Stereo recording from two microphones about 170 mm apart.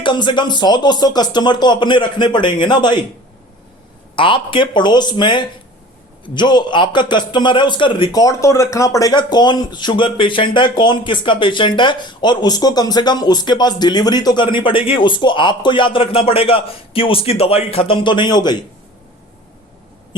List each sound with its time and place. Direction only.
0.0 s a man's voice: 30° left (ahead or behind)
4.1 s a man's voice: 30° left (ahead or behind)